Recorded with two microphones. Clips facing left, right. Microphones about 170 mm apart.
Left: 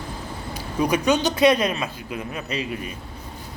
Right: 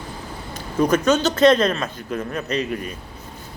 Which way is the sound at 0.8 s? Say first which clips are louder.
Right 3 dB; 15° left (ahead or behind).